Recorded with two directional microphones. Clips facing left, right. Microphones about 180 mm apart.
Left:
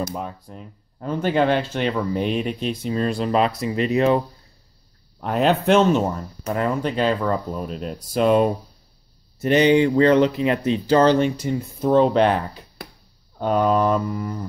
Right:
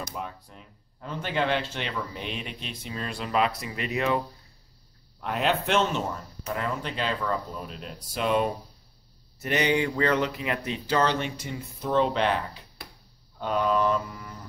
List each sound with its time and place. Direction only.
0.0 s speech: 40° left (ahead or behind)
5.2 s speech: 40° left (ahead or behind)
9.4 s speech: 30° left (ahead or behind)